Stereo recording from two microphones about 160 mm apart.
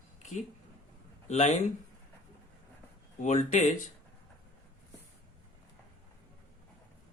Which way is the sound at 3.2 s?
45° left (ahead or behind).